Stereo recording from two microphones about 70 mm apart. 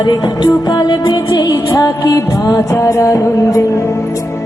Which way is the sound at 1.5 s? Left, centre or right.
Left.